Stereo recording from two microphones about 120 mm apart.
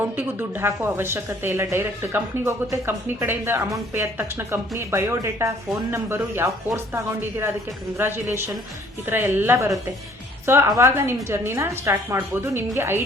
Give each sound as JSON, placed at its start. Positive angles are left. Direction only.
{"t": 0.0, "sound": "a woman's voice", "side_deg": -20}